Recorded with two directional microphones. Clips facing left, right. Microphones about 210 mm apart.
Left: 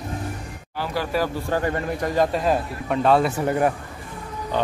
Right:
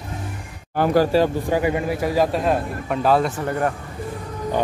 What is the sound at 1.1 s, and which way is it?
Speech, 25° right (ahead or behind).